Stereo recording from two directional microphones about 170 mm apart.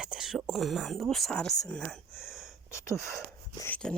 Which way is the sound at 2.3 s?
5° right (ahead or behind).